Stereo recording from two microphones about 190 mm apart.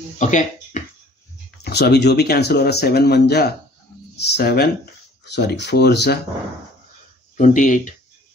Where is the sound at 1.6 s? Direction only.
60° left (ahead or behind).